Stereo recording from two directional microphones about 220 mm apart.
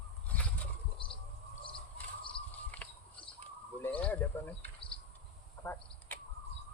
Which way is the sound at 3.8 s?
5° left (ahead or behind).